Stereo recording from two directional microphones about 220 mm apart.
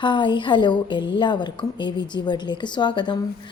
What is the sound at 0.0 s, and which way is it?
A woman's voice, 20° left (ahead or behind).